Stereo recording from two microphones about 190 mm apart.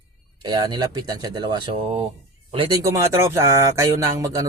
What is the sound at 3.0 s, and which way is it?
Speech, 15° right (ahead or behind).